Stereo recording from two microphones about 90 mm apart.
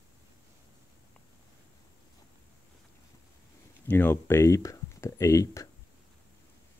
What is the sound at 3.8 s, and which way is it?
Speech, 20° left (ahead or behind).